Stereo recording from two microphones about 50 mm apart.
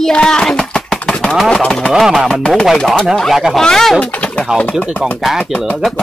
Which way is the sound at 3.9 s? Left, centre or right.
Left.